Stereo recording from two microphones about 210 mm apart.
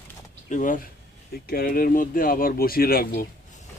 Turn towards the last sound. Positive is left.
turn(degrees=45)  # may be behind; listen again after turning